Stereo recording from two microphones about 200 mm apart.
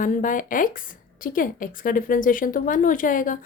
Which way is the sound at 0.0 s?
40° left (ahead or behind).